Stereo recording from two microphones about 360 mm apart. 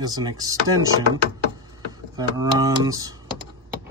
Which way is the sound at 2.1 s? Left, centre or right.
Centre.